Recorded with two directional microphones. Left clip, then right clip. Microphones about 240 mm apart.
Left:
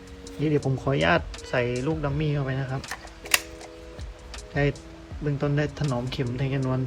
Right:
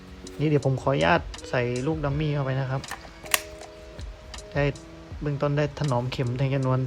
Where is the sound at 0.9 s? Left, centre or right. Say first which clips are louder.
Left 2 dB; centre.